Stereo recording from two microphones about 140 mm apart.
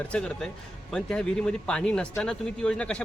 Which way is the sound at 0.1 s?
5° left (ahead or behind).